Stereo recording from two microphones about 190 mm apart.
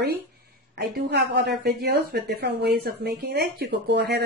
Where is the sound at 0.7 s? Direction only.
60° right (ahead or behind).